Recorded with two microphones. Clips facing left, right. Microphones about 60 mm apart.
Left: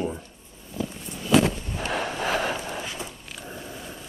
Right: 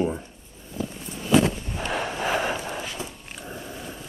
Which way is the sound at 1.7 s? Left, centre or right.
Centre.